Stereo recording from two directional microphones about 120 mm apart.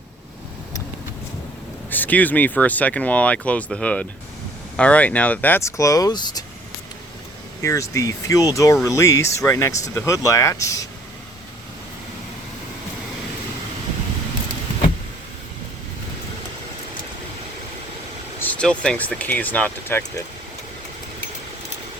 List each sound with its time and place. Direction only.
1.9 s speech: 15° left (ahead or behind); by 6.4 s 35° left (ahead or behind)
7.6 s speech: 25° left (ahead or behind)
18.3 s speech: 15° left (ahead or behind)